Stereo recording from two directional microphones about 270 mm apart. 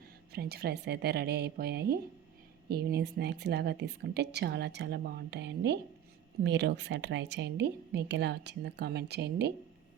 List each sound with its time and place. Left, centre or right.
0.3 s speech: right